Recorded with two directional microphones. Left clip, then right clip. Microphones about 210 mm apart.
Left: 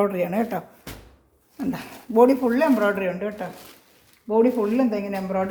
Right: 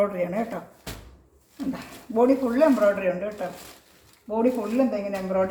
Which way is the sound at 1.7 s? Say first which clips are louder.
Left 6 dB; 55° left (ahead or behind).